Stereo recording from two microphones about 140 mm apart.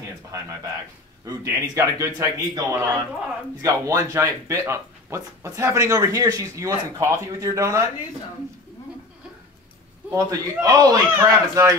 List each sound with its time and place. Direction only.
1.2 s speech: 25° right (ahead or behind)
10.1 s speech: 25° right (ahead or behind)